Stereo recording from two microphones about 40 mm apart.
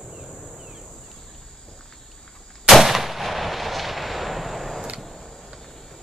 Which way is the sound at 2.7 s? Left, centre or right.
Centre.